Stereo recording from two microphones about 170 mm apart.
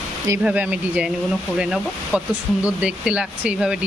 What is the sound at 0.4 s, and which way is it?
Speech, 10° right (ahead or behind).